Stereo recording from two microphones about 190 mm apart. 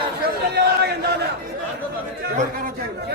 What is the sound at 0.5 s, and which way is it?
Chatter, 60° right (ahead or behind).